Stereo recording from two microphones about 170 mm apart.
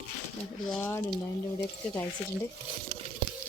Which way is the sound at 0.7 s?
15° left (ahead or behind).